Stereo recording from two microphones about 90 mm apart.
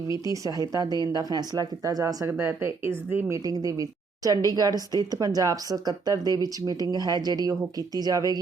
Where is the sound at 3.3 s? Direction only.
45° right (ahead or behind).